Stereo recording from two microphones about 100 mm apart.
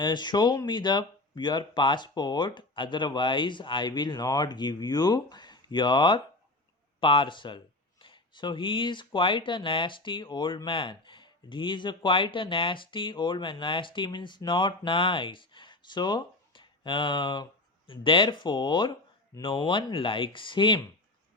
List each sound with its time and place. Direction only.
0.0 s speech: 45° left (ahead or behind)